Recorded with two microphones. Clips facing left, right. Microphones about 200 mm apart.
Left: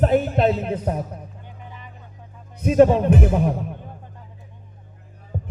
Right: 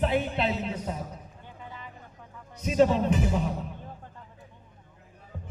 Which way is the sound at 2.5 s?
55° left (ahead or behind).